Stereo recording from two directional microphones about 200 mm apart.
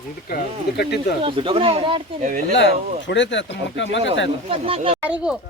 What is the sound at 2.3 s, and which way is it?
Speech, 45° right (ahead or behind).